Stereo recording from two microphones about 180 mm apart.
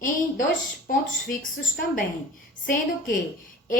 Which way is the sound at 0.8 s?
50° left (ahead or behind).